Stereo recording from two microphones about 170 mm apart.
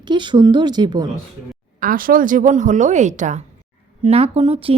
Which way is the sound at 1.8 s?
55° right (ahead or behind).